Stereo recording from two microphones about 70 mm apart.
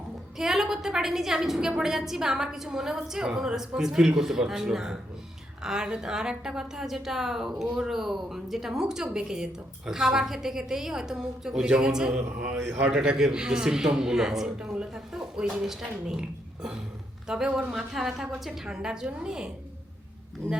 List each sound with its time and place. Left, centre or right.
0.3 s a woman's voice: centre
12.1 s a man's voice: right
12.9 s a woman's voice: centre
17.2 s a woman's voice: centre